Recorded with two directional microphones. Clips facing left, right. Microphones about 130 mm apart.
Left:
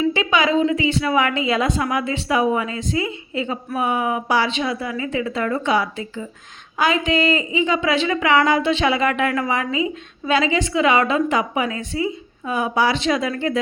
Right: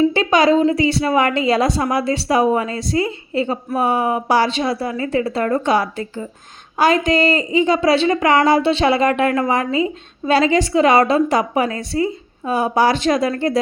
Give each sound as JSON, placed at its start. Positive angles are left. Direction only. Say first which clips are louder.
{"t": 0.1, "sound": "a woman's voice", "louder": "right 4 dB", "side_deg": -35}